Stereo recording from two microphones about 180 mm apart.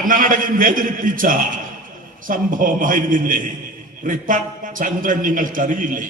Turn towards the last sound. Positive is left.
turn(degrees=-50)  # may be behind; listen again after turning